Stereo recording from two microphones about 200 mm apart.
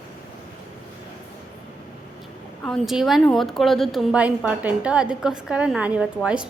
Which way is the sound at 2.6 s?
Centre (ahead or behind).